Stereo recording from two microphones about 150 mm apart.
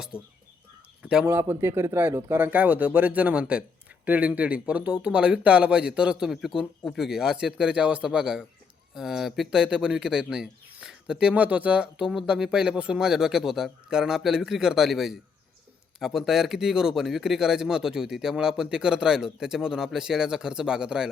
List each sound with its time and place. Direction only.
0.1 s speech: 15° left (ahead or behind)
1.0 s a man's voice: 10° right (ahead or behind)